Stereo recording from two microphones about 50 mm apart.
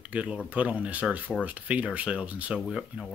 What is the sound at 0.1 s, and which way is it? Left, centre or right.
Speech, right.